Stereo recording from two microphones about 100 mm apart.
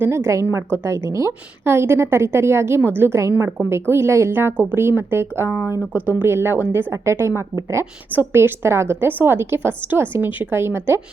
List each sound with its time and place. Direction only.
0.0 s a woman's voice: 25° right (ahead or behind)